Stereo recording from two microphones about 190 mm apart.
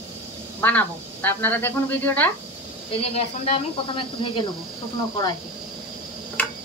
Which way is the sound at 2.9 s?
30° left (ahead or behind).